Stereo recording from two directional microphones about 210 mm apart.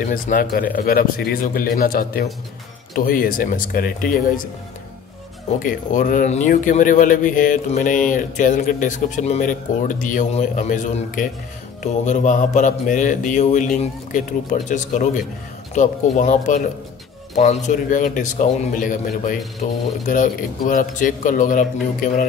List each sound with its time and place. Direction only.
0.0 s speech: 40° left (ahead or behind)
5.6 s speech: 40° left (ahead or behind)